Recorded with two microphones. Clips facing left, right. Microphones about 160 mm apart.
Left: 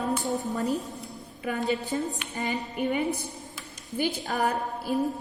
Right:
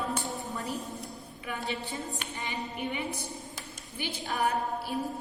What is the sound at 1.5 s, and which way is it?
Speech, 40° left (ahead or behind).